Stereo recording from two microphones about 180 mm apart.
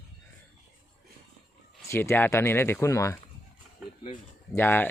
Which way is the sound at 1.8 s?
15° left (ahead or behind).